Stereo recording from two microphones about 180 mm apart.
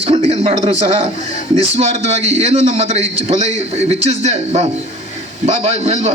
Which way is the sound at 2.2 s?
35° right (ahead or behind).